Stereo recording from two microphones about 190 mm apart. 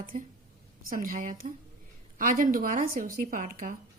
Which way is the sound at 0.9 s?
45° right (ahead or behind).